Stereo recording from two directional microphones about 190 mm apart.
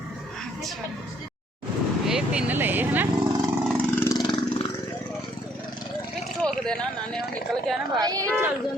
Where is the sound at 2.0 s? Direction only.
5° right (ahead or behind).